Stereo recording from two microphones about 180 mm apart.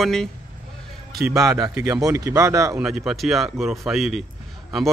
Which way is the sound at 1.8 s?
15° right (ahead or behind).